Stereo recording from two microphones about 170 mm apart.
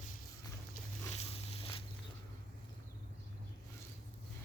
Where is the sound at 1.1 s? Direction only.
35° left (ahead or behind).